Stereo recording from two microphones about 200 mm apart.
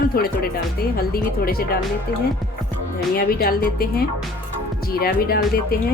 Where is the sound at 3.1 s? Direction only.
50° left (ahead or behind).